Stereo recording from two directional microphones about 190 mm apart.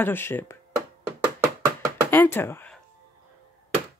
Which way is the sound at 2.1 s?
10° left (ahead or behind).